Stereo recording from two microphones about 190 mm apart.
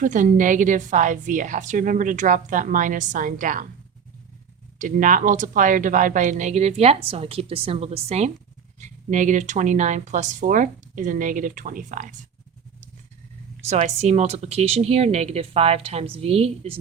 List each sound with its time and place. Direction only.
0.0 s a woman's voice: 40° right (ahead or behind)
4.8 s a woman's voice: 45° right (ahead or behind)
13.7 s speech: 35° right (ahead or behind)